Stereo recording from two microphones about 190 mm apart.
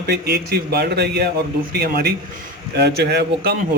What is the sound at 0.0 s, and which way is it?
A man's voice, 60° right (ahead or behind).